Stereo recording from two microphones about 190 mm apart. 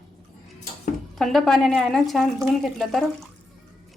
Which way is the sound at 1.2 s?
Centre (ahead or behind).